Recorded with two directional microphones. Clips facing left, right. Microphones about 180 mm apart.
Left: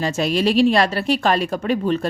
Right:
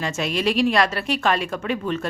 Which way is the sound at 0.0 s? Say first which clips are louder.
Left 4 dB; 35° left (ahead or behind).